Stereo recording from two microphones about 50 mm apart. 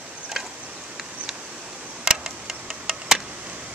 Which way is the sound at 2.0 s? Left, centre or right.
Centre.